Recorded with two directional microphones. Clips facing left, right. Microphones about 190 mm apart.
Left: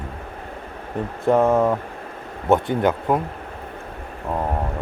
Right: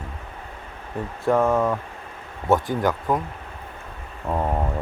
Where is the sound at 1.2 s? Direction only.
20° left (ahead or behind).